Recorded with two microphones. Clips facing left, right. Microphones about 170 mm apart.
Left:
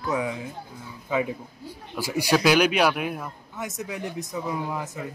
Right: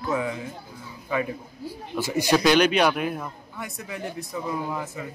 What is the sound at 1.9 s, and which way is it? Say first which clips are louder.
A man's voice: right 1 dB; 10° left (ahead or behind).